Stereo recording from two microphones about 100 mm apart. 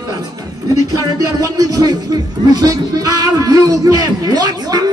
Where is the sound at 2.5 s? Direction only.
40° right (ahead or behind).